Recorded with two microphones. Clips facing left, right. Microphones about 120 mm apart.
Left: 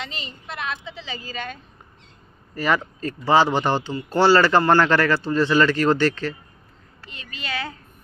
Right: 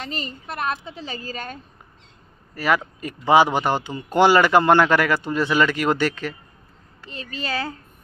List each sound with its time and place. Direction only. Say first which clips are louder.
0.0 s a woman's voice: right 3 dB; 45° right (ahead or behind)
2.5 s speech: right 1 dB; 5° right (ahead or behind)
7.1 s a woman's voice: right 4 dB; 35° right (ahead or behind)